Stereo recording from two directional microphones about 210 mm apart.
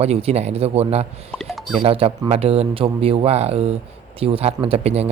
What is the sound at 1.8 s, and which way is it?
Speech, 25° right (ahead or behind).